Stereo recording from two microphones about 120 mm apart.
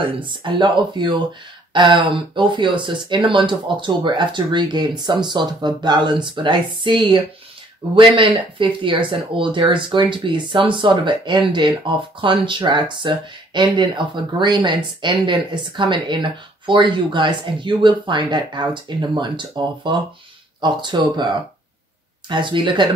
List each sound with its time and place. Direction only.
0.2 s speech: 45° right (ahead or behind)
22.3 s speech: 40° right (ahead or behind)